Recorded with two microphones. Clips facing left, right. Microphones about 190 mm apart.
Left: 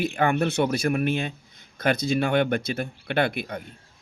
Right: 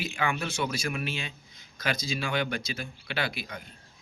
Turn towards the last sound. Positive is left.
turn(degrees=55)  # may be behind; listen again after turning